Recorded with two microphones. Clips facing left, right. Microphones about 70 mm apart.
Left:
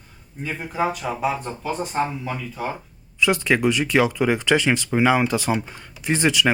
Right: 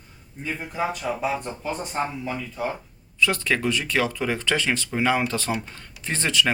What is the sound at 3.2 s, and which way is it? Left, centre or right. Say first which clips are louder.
Speech: left 4 dB; centre.